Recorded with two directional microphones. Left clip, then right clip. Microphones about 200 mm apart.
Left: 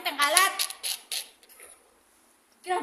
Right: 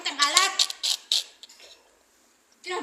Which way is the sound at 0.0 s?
25° left (ahead or behind).